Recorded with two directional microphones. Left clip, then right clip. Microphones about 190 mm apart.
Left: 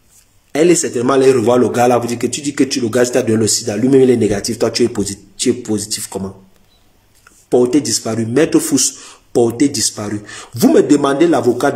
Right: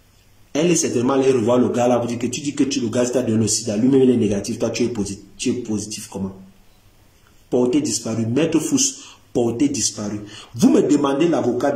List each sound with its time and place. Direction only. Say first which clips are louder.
0.5 s a sound: left 7 dB; 15° right (ahead or behind)
0.9 s a man's voice: left 6 dB; 15° right (ahead or behind)
7.4 s a man's voice: left 6 dB; 15° right (ahead or behind)